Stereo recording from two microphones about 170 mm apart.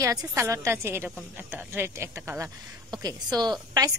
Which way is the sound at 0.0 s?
20° right (ahead or behind).